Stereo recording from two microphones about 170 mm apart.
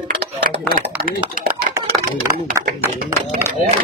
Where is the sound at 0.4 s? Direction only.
55° right (ahead or behind).